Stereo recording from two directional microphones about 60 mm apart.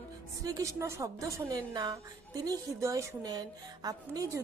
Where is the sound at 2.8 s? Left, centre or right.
Right.